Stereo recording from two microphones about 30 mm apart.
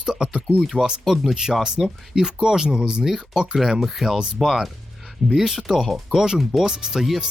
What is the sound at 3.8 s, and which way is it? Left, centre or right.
Speech, centre.